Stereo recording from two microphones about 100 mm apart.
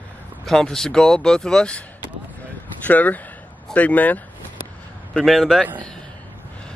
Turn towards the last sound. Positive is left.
turn(degrees=0)  # may be behind; listen again after turning